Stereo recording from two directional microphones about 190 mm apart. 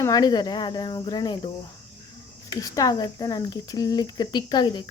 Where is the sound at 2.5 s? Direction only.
20° left (ahead or behind).